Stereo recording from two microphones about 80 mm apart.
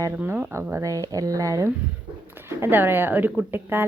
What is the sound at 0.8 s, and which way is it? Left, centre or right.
Speech, right.